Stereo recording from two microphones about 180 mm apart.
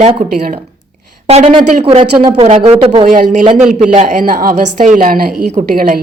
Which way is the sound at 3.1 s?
45° right (ahead or behind).